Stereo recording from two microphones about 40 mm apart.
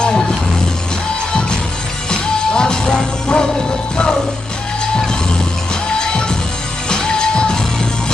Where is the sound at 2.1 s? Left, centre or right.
Centre.